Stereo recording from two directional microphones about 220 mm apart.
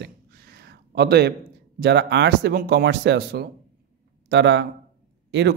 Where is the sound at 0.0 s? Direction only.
45° right (ahead or behind).